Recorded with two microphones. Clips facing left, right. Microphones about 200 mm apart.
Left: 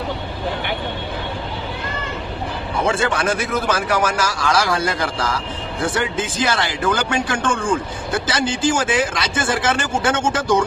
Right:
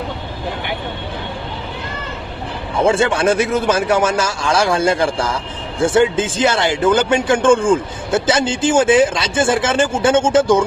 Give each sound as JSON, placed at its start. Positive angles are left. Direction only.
{"t": 2.8, "sound": "a man's voice", "side_deg": -25}